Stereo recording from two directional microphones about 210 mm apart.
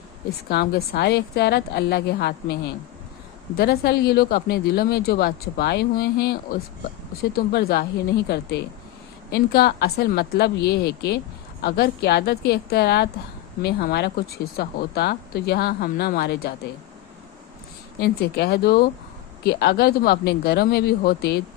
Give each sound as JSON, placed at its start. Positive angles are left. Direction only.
{"t": 0.5, "sound": "speech", "side_deg": 45}
{"t": 3.6, "sound": "speech", "side_deg": 50}
{"t": 7.3, "sound": "speech", "side_deg": 50}
{"t": 18.0, "sound": "speech", "side_deg": 50}